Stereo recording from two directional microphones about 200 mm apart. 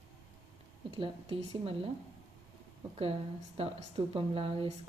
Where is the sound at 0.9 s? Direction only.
25° right (ahead or behind).